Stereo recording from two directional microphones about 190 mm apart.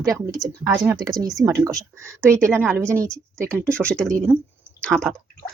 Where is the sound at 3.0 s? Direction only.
5° left (ahead or behind).